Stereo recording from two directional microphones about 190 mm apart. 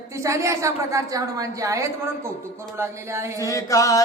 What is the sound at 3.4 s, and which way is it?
Speech, 15° left (ahead or behind).